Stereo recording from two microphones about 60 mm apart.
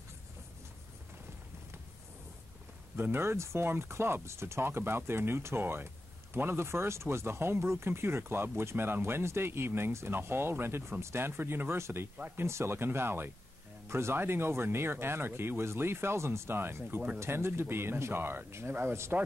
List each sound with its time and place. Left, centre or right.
3.0 s speech: right